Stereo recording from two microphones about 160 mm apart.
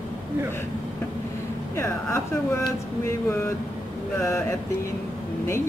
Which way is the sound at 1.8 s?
15° left (ahead or behind).